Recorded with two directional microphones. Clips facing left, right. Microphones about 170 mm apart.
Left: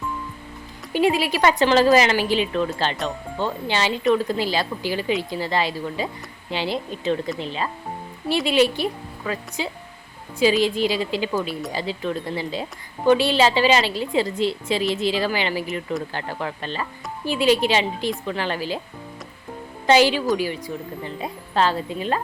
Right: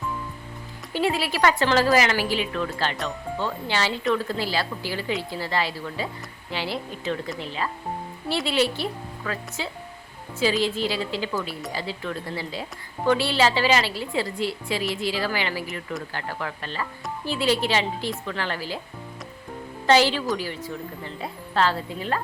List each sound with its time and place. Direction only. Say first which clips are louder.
0.9 s speech: left 4 dB; 15° left (ahead or behind)
19.9 s speech: left 3 dB; 15° left (ahead or behind)